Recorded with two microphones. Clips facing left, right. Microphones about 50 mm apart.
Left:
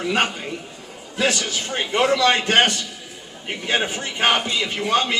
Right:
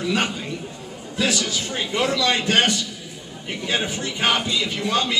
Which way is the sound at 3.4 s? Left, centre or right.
Left.